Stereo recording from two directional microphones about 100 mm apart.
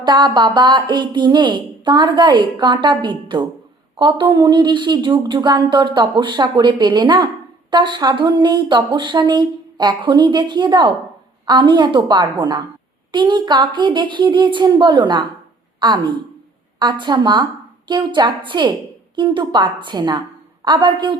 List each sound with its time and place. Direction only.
0.0 s speech: 50° right (ahead or behind)